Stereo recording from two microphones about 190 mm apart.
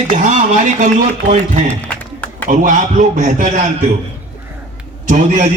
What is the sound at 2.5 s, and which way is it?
A man's voice, 40° right (ahead or behind).